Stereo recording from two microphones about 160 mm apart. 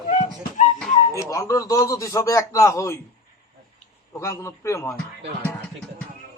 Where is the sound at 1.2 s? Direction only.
20° left (ahead or behind).